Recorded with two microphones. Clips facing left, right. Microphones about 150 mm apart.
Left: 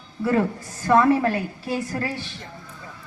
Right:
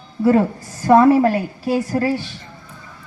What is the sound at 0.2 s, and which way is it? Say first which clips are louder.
A woman's voice: right 6 dB; 30° right (ahead or behind).